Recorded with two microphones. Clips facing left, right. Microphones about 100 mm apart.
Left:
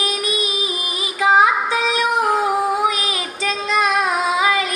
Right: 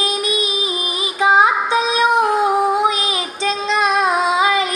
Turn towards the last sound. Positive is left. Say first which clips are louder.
# right 2 dB
turn(degrees=-25)  # may be behind; listen again after turning